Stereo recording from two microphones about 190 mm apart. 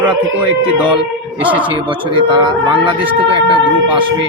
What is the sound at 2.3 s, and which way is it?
Speech, 25° right (ahead or behind).